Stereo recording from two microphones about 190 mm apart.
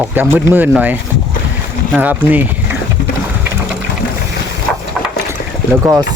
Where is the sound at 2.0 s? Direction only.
10° right (ahead or behind).